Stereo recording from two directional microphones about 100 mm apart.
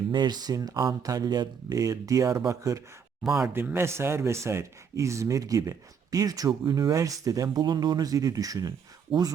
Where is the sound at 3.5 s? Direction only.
25° right (ahead or behind).